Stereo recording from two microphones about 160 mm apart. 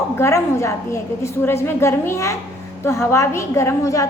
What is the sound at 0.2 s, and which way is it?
A woman's voice, 20° left (ahead or behind).